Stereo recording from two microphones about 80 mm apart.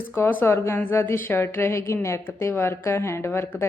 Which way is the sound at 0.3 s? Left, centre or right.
Left.